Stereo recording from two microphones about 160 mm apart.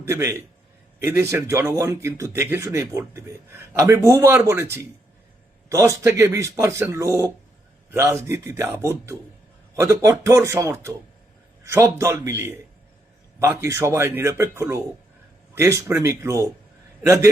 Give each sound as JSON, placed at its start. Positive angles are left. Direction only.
{"t": 0.0, "sound": "speech", "side_deg": -15}